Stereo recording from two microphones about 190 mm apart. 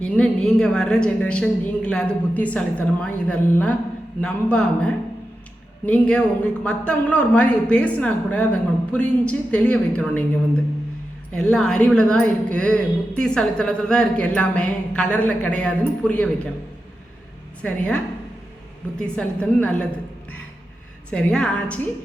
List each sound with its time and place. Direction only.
0.0 s a woman's voice: 5° left (ahead or behind)
11.3 s a woman's voice: 5° left (ahead or behind)
17.6 s a woman's voice: 5° left (ahead or behind)
21.1 s a woman's voice: 5° left (ahead or behind)